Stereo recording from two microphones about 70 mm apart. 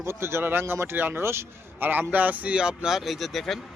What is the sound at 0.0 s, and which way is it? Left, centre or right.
A man's voice, right.